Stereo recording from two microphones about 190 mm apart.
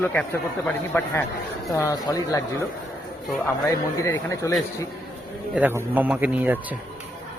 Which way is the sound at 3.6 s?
15° left (ahead or behind).